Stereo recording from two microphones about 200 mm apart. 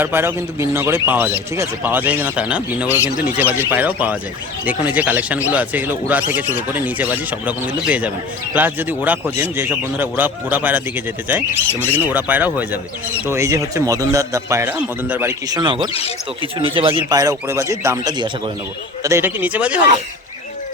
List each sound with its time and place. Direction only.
0.0 s a man's voice: 10° right (ahead or behind)
15.9 s speech: 30° left (ahead or behind)
16.6 s a man's voice: 25° right (ahead or behind); by 19.8 s 5° right (ahead or behind)